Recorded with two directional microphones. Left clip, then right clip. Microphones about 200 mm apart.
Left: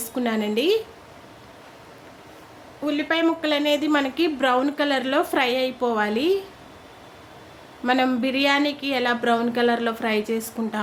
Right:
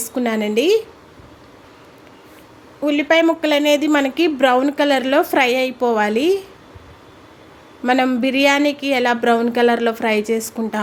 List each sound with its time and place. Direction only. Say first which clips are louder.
0.0 s a woman's voice: right 5 dB; 20° right (ahead or behind)
2.8 s a woman's voice: right 7 dB; 25° right (ahead or behind)
7.9 s a woman's voice: right 5 dB; 20° right (ahead or behind)